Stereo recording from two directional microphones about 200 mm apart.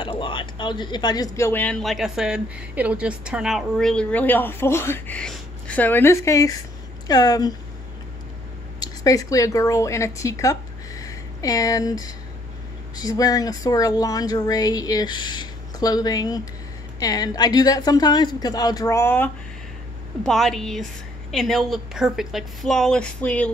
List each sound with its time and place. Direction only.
0.0 s speech: 25° left (ahead or behind)
8.7 s a woman's voice: 20° left (ahead or behind)